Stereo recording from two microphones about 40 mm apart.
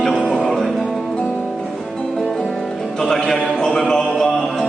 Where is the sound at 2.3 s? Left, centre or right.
Centre.